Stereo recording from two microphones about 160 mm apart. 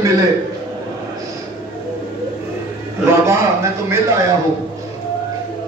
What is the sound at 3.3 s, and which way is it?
Speech, 15° right (ahead or behind).